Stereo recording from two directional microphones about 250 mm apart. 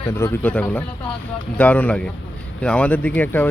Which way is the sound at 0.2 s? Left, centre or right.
Centre.